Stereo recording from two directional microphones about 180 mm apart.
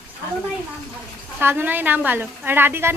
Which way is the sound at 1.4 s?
10° right (ahead or behind).